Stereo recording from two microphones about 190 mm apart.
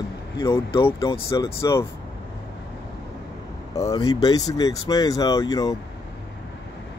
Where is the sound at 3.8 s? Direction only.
20° left (ahead or behind).